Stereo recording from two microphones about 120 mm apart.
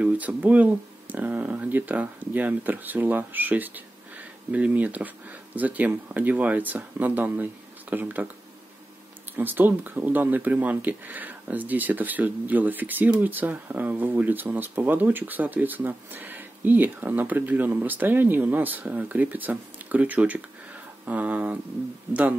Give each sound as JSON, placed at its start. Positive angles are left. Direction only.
{"t": 0.0, "sound": "speech", "side_deg": -10}
{"t": 9.4, "sound": "speech", "side_deg": -15}